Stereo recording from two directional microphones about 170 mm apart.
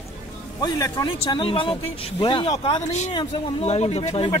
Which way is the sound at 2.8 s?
45° left (ahead or behind).